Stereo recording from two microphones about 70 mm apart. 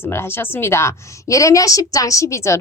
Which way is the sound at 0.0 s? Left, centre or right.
Left.